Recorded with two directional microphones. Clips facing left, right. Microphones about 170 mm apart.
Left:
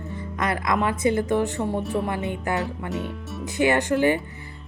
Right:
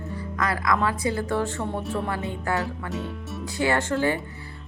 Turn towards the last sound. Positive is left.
turn(degrees=20)  # may be behind; listen again after turning